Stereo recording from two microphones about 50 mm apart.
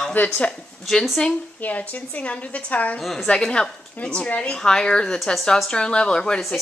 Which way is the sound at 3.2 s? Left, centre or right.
Centre.